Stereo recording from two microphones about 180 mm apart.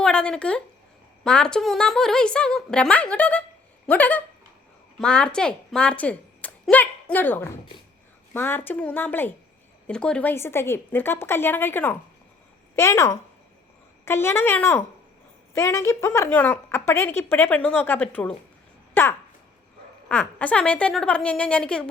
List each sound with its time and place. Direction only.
0.0 s a woman's voice: 5° left (ahead or behind)